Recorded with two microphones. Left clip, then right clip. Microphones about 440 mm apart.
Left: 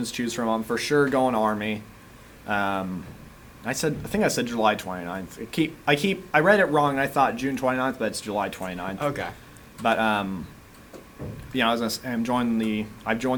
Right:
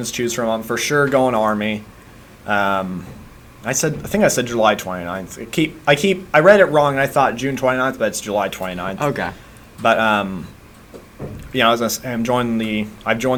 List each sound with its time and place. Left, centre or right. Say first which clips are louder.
0.0 s speech: right 7 dB; right
9.0 s a man's voice: right 7 dB; left
9.8 s speech: right 7 dB; right
11.5 s speech: right 8 dB; right